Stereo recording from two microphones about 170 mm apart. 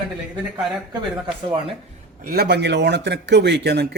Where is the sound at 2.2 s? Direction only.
70° right (ahead or behind).